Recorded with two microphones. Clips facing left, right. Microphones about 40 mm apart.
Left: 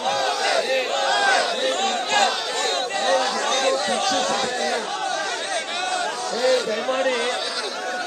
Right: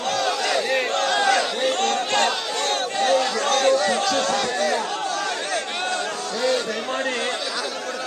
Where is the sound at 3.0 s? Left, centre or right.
Left.